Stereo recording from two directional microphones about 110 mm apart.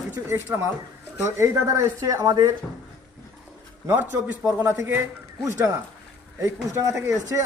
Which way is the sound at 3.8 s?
15° right (ahead or behind).